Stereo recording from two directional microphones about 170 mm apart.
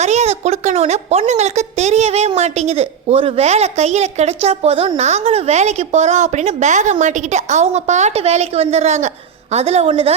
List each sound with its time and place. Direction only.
0.0 s a woman's voice: 40° right (ahead or behind)